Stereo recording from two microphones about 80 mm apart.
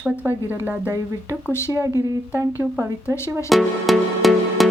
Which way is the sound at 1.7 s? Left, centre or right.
Right.